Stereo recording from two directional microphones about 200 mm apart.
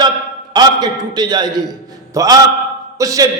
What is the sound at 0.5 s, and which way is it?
A man's voice, 20° right (ahead or behind).